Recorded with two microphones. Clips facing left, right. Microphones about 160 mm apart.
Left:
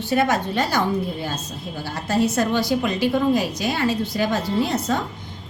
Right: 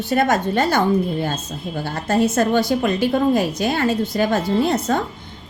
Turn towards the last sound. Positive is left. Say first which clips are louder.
# right 3 dB
turn(degrees=-55)  # may be behind; listen again after turning